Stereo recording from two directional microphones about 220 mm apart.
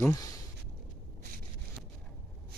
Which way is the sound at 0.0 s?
15° left (ahead or behind).